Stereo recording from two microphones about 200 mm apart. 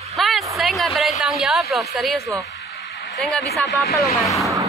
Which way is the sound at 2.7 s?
60° left (ahead or behind).